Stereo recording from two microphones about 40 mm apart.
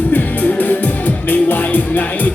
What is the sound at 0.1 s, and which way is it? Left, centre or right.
Music, left.